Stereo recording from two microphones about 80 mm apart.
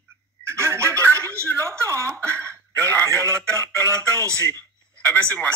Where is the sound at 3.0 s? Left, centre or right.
Right.